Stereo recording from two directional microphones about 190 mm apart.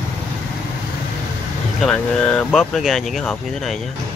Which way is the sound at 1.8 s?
5° left (ahead or behind).